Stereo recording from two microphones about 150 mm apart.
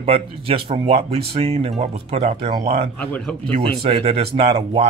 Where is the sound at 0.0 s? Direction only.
40° right (ahead or behind).